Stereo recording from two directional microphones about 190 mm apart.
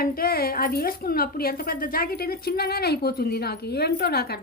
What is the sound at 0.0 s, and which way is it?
A woman's voice, 50° left (ahead or behind).